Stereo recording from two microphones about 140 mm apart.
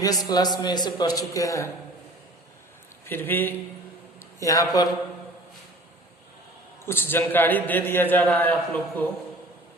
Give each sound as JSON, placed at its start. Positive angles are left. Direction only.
{"t": 0.0, "sound": "a man's voice", "side_deg": 25}
{"t": 3.1, "sound": "a man's voice", "side_deg": 15}
{"t": 6.8, "sound": "a man's voice", "side_deg": 15}